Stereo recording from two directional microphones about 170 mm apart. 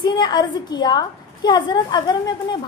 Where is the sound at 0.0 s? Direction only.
25° left (ahead or behind).